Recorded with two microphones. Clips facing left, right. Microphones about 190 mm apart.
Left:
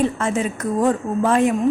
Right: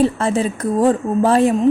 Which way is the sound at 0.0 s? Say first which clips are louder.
Right 4 dB; 35° right (ahead or behind).